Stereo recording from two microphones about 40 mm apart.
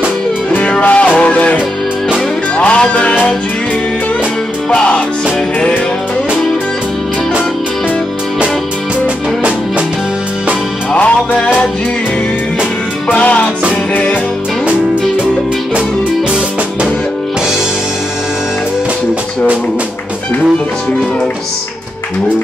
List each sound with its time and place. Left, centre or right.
0.5 s music: left
4.6 s music: left
9.0 s music: right
10.9 s music: left
13.2 s music: left